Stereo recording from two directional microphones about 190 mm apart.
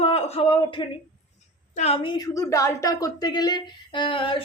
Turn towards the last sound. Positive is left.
turn(degrees=25)  # may be behind; listen again after turning